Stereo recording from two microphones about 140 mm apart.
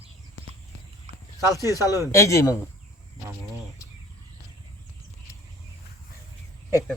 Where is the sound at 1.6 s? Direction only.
20° right (ahead or behind).